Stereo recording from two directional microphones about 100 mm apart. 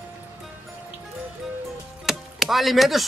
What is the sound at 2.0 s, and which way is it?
Chopping, centre (ahead or behind).